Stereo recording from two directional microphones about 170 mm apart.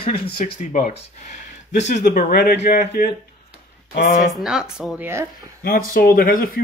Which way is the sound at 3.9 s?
50° left (ahead or behind).